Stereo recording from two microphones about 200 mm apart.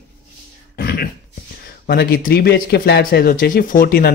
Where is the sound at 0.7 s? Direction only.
55° left (ahead or behind).